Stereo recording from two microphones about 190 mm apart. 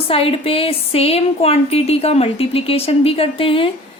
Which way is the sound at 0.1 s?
30° left (ahead or behind).